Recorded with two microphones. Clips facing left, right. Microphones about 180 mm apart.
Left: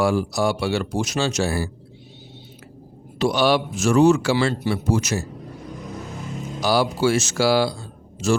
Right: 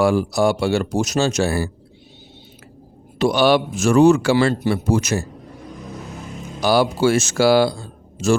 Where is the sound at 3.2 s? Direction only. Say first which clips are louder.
Right 3 dB; 55° right (ahead or behind).